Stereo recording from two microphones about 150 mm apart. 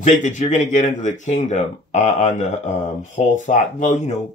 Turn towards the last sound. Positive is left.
turn(degrees=50)  # may be behind; listen again after turning